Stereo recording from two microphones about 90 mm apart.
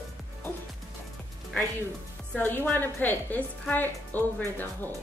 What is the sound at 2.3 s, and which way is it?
Speech, 15° left (ahead or behind).